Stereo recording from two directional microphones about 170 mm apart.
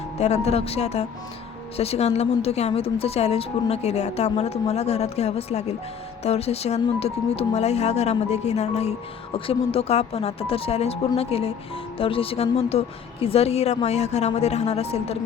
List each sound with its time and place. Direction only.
0.2 s a woman's voice: 40° left (ahead or behind)